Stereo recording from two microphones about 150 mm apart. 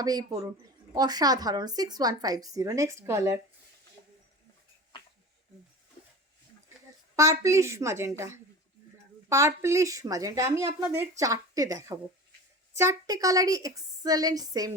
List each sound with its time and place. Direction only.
0.0 s speech: 25° right (ahead or behind)
7.2 s speech: 20° right (ahead or behind)